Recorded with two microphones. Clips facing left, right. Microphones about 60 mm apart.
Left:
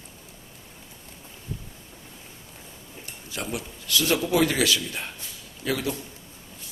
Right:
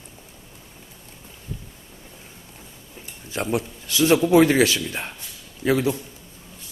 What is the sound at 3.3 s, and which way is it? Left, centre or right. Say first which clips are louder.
Speech: right 8 dB; right.